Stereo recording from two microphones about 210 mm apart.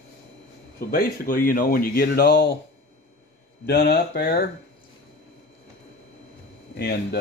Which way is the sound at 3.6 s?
50° left (ahead or behind).